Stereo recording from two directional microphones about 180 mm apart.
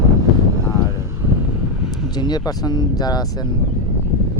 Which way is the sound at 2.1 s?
20° left (ahead or behind).